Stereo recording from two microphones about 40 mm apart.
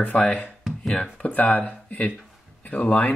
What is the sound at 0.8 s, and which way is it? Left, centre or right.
Speech, centre.